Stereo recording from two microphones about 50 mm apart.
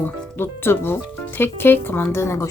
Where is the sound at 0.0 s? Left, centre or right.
Left.